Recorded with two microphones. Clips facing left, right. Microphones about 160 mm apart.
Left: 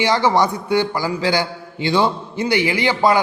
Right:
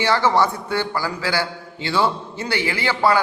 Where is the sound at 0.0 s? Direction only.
15° left (ahead or behind).